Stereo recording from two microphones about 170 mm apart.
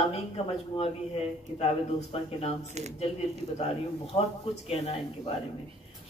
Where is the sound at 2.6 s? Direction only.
40° right (ahead or behind).